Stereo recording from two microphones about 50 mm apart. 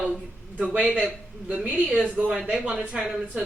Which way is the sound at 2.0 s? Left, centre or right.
Right.